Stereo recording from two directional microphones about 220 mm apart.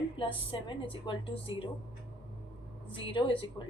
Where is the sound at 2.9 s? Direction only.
25° left (ahead or behind).